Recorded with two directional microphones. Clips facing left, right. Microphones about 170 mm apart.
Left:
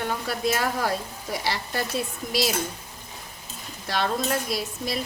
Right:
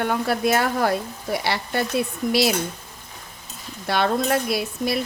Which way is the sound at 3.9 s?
60° right (ahead or behind).